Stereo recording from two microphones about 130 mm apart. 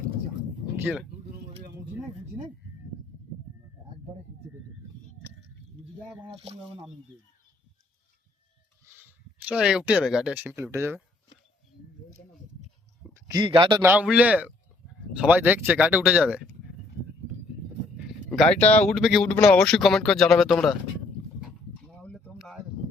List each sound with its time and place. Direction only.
0.8 s speech: 10° right (ahead or behind)
6.2 s speech: 45° right (ahead or behind)
9.5 s speech: 5° right (ahead or behind)
10.5 s speech: 20° right (ahead or behind)
13.1 s a sound: 25° right (ahead or behind)
13.4 s a man's voice: 35° right (ahead or behind)
13.8 s speech: 10° right (ahead or behind)
17.9 s speech: 5° left (ahead or behind)
21.8 s a sound: 5° left (ahead or behind)